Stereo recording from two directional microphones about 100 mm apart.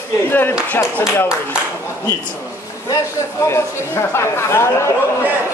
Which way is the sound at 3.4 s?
25° left (ahead or behind).